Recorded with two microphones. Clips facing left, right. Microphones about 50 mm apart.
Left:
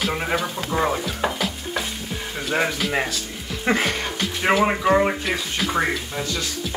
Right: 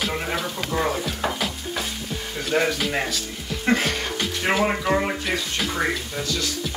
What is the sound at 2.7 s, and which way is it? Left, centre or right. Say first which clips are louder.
Speech: left 1 dB; centre.